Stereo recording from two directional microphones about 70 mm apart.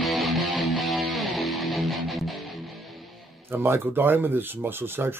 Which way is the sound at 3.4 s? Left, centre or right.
Right.